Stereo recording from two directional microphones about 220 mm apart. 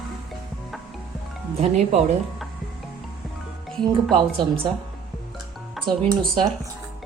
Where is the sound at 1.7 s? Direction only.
30° right (ahead or behind).